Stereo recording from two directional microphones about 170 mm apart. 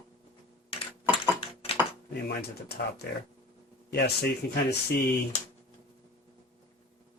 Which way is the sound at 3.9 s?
70° left (ahead or behind).